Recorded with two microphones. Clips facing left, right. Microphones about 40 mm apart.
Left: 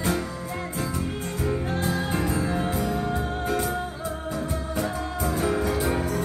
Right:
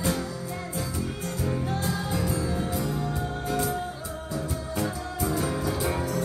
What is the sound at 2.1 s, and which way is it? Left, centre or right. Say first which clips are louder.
Music: left 3 dB; left.